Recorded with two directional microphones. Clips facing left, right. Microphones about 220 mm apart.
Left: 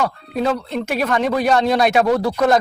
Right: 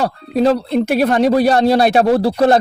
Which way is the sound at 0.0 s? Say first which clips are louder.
Right 5 dB; 35° right (ahead or behind).